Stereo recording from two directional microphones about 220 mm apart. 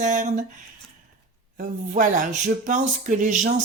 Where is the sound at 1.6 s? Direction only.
35° right (ahead or behind).